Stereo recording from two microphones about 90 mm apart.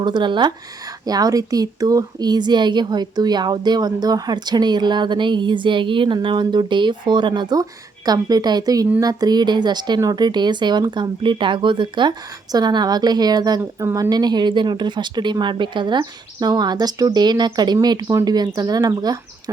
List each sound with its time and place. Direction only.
0.0 s speech: 60° right (ahead or behind)
1.0 s speech: 45° right (ahead or behind)
7.5 s speech: 45° right (ahead or behind); by 12.1 s 65° right (ahead or behind)
12.5 s speech: 50° right (ahead or behind)
13.6 s speech: 25° right (ahead or behind)
13.9 s speech: 45° right (ahead or behind)